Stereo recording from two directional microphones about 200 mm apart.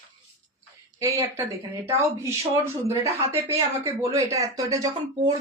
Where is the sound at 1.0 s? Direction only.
15° right (ahead or behind).